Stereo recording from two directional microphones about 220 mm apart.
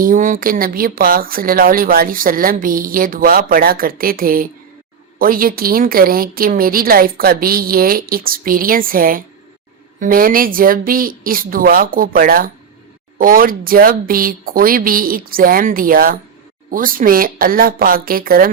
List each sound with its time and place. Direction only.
0.0 s speech: 40° right (ahead or behind)